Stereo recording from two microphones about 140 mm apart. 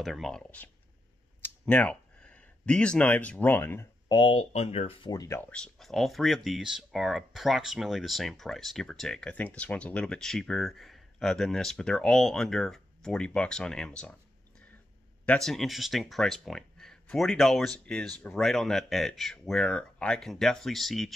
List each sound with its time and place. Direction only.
0.0 s speech: centre (ahead or behind); by 3.8 s 15° left (ahead or behind)
4.1 s speech: 35° left (ahead or behind)
5.1 s speech: 25° left (ahead or behind)
5.4 s speech: 5° left (ahead or behind)
15.2 s speech: 5° left (ahead or behind)